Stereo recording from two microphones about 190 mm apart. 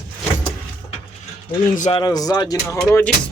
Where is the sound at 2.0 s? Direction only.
20° left (ahead or behind).